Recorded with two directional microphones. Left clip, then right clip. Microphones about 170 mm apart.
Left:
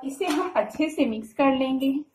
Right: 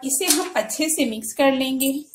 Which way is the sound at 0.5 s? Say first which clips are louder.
Right 2 dB; 70° right (ahead or behind).